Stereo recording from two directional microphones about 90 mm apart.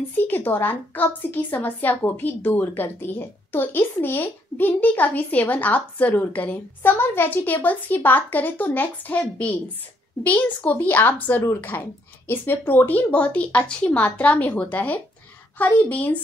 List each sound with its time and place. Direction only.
0.2 s a woman's voice: 20° left (ahead or behind)